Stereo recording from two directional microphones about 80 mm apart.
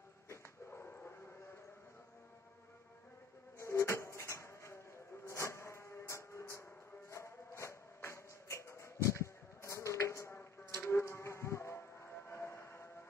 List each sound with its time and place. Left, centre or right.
0.3 s dog: left
3.5 s a sound: left
7.1 s music: left